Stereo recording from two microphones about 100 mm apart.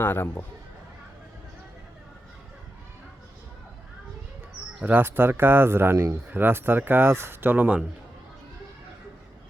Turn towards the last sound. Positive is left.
turn(degrees=-15)  # may be behind; listen again after turning